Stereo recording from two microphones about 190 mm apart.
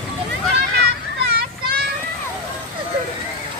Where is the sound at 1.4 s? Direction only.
50° right (ahead or behind).